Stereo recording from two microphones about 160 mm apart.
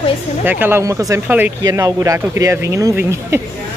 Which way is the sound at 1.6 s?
20° right (ahead or behind).